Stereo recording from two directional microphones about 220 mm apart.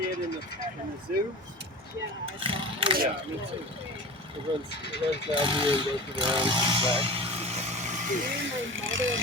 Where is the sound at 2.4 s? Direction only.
25° right (ahead or behind).